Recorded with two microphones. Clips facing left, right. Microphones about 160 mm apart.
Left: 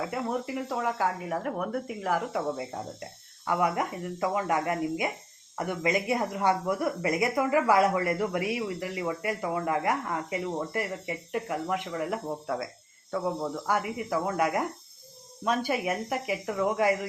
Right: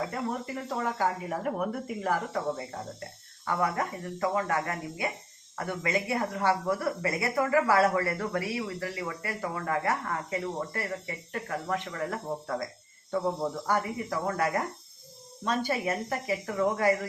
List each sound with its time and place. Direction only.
0.1 s speech: 5° left (ahead or behind)
3.4 s speech: 15° left (ahead or behind)
13.7 s speech: 10° left (ahead or behind)